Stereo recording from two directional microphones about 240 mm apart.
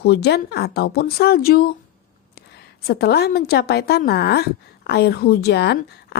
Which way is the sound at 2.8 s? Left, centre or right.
Left.